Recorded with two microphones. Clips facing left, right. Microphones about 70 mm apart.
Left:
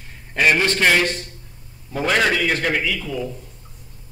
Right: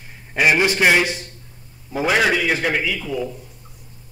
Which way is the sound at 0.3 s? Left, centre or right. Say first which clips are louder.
Right 1 dB; centre.